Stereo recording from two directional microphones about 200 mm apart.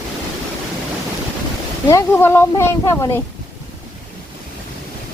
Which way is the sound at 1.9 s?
15° left (ahead or behind).